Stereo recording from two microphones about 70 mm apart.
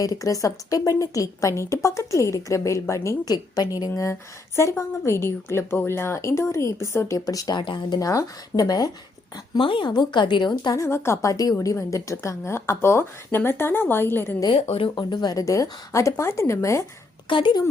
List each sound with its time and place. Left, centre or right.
0.0 s a woman's voice: left
3.2 s a woman's voice: left
4.1 s a woman's voice: left
7.3 s a woman's voice: left
8.0 s a woman's voice: left
9.8 s a woman's voice: left
10.8 s a woman's voice: left
14.9 s speech: left
15.4 s a woman's voice: left